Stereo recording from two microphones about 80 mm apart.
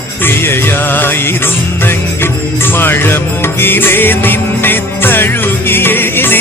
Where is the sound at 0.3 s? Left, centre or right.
Left.